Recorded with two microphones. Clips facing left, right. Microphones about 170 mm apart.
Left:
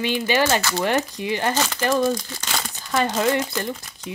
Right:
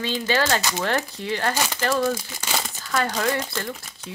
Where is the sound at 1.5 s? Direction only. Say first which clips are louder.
Left 2 dB; 10° right (ahead or behind).